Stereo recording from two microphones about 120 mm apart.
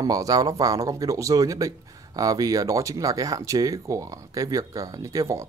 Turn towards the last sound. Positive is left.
turn(degrees=-25)  # may be behind; listen again after turning